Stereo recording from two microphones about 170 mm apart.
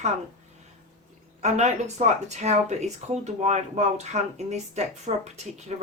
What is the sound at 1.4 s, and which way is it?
A woman's voice, 40° right (ahead or behind).